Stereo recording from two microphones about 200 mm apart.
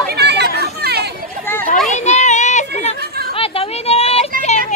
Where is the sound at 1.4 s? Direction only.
10° left (ahead or behind).